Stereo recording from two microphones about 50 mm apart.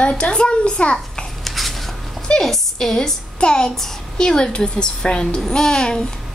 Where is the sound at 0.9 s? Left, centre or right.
Centre.